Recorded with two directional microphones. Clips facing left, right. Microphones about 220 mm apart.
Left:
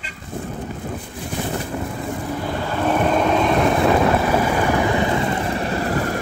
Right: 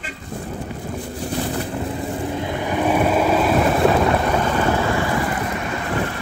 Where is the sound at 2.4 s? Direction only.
20° right (ahead or behind).